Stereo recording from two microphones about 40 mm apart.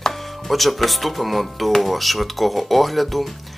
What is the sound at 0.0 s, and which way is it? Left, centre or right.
Speech, centre.